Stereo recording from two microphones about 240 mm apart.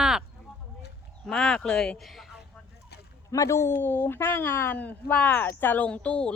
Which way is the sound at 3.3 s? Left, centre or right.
Centre.